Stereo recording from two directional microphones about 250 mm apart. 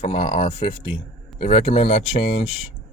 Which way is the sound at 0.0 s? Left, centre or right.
Centre.